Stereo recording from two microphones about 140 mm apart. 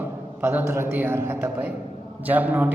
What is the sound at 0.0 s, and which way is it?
A man's voice, 15° right (ahead or behind).